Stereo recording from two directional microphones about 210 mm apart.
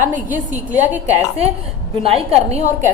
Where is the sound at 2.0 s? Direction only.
30° right (ahead or behind).